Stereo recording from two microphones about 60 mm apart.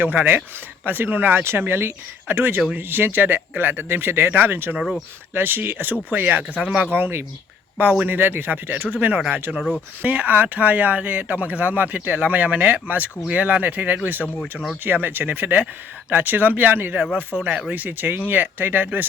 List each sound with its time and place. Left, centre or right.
0.0 s speech: right
4.8 s speech: centre
5.3 s speech: right
6.9 s speech: right
9.6 s speech: centre
10.0 s speech: right